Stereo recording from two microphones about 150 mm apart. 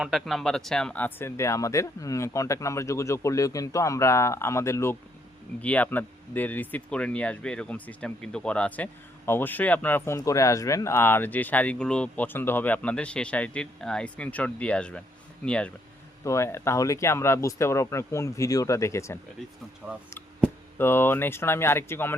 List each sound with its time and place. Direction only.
0.0 s speech: centre (ahead or behind)
16.2 s speech: 20° left (ahead or behind)
19.8 s speech: 10° right (ahead or behind)
20.7 s speech: 15° left (ahead or behind)